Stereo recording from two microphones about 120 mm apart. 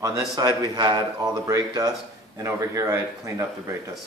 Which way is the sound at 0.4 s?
30° right (ahead or behind).